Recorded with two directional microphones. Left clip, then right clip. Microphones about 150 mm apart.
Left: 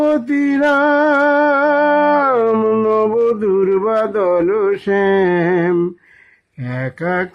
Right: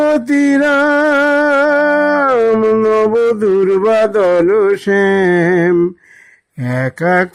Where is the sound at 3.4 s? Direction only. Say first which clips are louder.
Right 3 dB; 30° right (ahead or behind).